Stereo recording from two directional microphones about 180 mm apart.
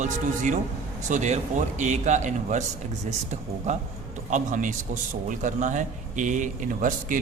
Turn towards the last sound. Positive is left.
turn(degrees=-50)  # may be behind; listen again after turning